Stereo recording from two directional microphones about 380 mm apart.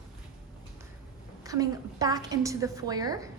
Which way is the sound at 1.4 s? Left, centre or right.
Centre.